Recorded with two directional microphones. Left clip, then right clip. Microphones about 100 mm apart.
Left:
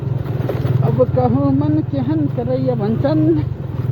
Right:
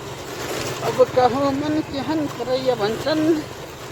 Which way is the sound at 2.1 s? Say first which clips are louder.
Left 2 dB; 15° right (ahead or behind).